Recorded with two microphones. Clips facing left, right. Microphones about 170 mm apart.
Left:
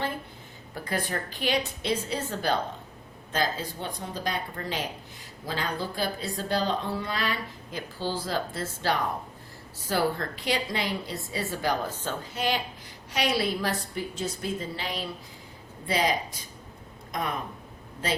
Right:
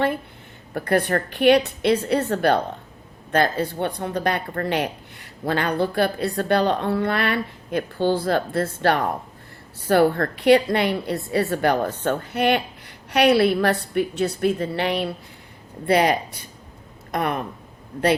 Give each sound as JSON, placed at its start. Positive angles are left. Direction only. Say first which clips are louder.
{"t": 0.7, "sound": "speech", "louder": "right 10 dB", "side_deg": -60}